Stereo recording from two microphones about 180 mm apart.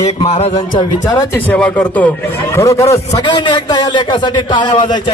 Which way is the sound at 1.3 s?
10° left (ahead or behind).